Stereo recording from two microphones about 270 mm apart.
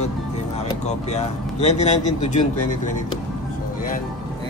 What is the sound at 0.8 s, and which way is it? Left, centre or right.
Speech, left.